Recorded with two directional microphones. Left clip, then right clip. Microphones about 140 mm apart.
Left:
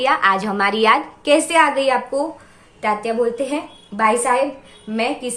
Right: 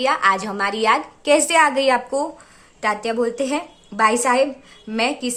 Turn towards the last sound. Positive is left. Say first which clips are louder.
# even
turn(degrees=-45)  # may be behind; listen again after turning